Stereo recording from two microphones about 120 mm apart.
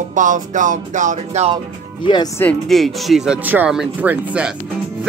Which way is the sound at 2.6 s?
Centre (ahead or behind).